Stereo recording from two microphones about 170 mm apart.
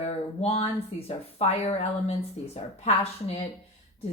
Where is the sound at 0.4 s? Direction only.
35° left (ahead or behind).